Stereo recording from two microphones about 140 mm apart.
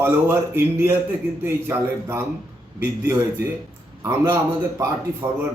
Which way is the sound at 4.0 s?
15° right (ahead or behind).